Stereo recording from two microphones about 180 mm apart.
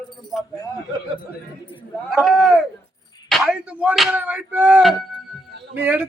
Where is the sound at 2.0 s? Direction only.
Centre (ahead or behind).